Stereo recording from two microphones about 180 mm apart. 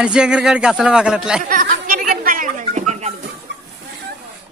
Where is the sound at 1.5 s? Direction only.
50° right (ahead or behind).